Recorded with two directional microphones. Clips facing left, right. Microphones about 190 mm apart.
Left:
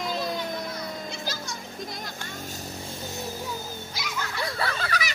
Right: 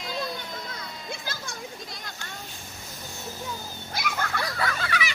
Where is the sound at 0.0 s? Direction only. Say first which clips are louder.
Left 4 dB; 55° left (ahead or behind).